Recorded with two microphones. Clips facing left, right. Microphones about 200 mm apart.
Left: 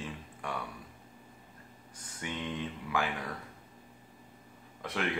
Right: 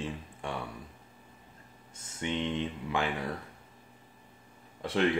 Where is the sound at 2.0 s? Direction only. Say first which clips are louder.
Right 6 dB; 25° right (ahead or behind).